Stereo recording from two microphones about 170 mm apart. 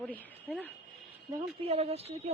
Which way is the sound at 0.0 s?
10° left (ahead or behind).